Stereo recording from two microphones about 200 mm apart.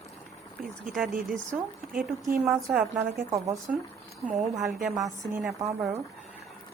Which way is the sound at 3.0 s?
15° right (ahead or behind).